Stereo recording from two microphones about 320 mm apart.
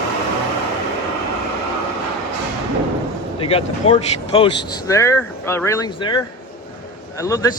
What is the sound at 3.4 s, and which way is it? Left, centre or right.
Speech, centre.